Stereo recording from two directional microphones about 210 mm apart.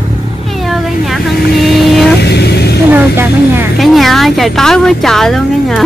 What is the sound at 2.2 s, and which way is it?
Vehicle, 50° left (ahead or behind).